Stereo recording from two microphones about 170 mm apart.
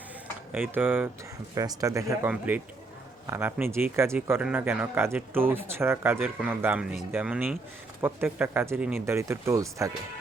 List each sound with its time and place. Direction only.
0.5 s speech: 10° right (ahead or behind)